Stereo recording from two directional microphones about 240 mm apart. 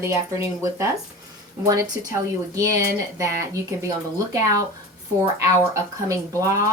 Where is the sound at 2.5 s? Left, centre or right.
Centre.